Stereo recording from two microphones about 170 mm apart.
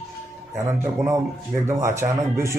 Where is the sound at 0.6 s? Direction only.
20° right (ahead or behind).